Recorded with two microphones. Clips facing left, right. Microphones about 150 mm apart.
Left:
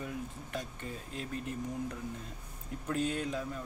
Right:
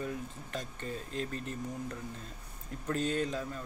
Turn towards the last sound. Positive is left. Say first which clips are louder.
# right 2 dB
turn(degrees=10)  # may be behind; listen again after turning